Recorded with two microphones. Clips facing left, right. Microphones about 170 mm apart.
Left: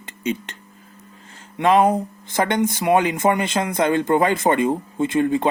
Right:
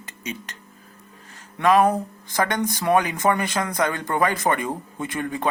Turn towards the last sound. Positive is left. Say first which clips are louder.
# left 9 dB
turn(degrees=25)  # may be behind; listen again after turning